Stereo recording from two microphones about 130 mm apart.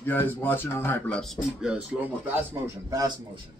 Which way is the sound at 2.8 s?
30° right (ahead or behind).